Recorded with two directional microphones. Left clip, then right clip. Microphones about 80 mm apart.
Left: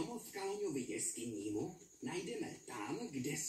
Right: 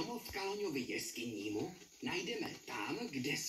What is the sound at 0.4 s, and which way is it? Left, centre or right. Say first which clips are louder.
Speech: right 1 dB; centre.